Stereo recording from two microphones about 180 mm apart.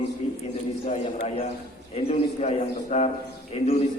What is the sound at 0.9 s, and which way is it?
A man's voice, 40° left (ahead or behind).